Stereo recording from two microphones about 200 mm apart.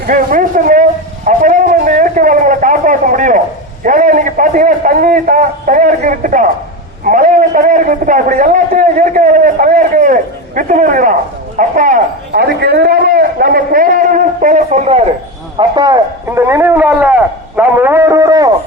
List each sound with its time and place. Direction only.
0.1 s a sound: 45° right (ahead or behind)
3.8 s a man's voice: 40° right (ahead or behind)
15.5 s a man's voice: 20° right (ahead or behind)